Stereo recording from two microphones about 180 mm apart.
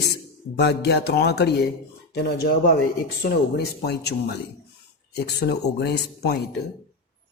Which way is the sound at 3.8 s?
65° left (ahead or behind).